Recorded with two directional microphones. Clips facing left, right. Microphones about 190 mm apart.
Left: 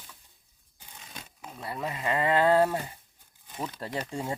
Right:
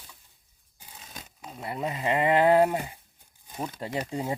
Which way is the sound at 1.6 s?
20° right (ahead or behind).